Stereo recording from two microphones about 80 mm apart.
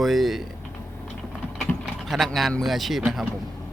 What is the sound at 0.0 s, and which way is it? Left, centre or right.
Speech, centre.